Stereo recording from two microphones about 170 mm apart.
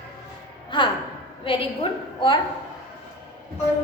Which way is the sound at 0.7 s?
30° left (ahead or behind).